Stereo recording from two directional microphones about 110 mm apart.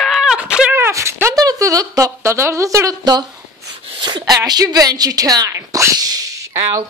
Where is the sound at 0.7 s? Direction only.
25° right (ahead or behind).